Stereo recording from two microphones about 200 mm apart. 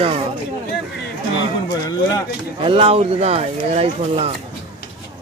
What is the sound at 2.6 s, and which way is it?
Speech, 25° right (ahead or behind).